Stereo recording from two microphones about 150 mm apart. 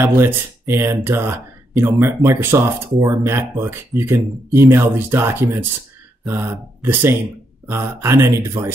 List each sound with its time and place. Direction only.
0.0 s speech: 15° right (ahead or behind)